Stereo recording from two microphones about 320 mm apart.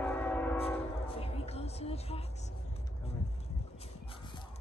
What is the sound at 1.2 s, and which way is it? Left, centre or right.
Music, centre.